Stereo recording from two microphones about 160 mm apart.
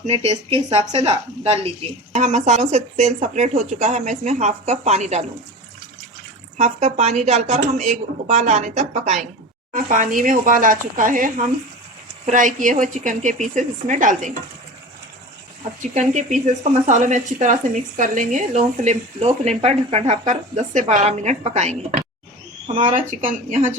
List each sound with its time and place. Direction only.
0.1 s speech: 40° right (ahead or behind)
6.6 s speech: 40° right (ahead or behind)
15.8 s speech: 50° right (ahead or behind)